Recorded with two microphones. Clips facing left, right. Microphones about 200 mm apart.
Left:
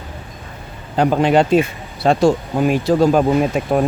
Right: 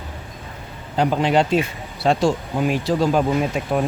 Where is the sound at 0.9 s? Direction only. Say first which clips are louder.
Left 4 dB; 50° left (ahead or behind).